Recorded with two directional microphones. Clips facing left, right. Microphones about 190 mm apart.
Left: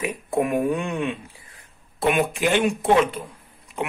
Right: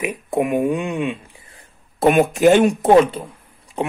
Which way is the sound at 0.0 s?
20° right (ahead or behind).